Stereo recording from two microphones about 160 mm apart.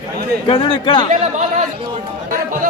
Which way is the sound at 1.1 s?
50° right (ahead or behind).